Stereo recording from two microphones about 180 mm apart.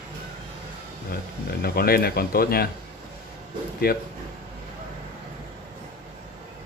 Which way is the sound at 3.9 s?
55° left (ahead or behind).